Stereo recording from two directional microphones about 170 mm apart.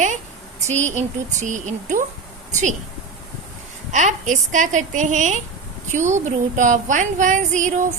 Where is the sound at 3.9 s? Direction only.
45° right (ahead or behind).